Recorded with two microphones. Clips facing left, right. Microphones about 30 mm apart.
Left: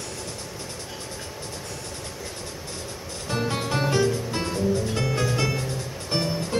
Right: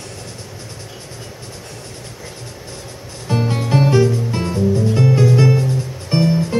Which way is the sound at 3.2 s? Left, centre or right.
Centre.